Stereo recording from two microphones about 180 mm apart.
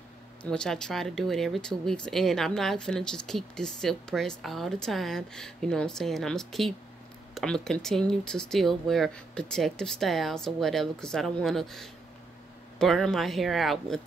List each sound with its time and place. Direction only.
0.4 s speech: 5° left (ahead or behind)